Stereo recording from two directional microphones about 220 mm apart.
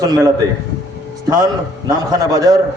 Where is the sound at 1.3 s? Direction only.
15° right (ahead or behind).